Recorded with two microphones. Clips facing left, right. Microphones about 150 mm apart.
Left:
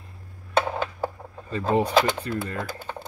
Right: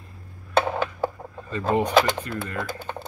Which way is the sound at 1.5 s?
25° left (ahead or behind).